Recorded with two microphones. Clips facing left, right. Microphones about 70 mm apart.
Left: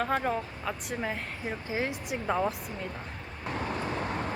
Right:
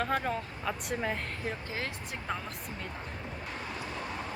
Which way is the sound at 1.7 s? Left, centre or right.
Centre.